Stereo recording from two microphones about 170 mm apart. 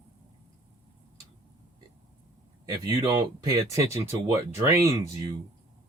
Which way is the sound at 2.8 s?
25° right (ahead or behind).